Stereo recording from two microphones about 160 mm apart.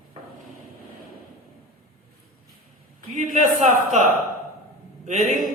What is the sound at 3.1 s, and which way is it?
Speech, 45° right (ahead or behind).